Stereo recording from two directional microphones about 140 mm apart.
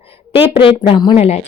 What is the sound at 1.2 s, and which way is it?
Speech, 50° left (ahead or behind).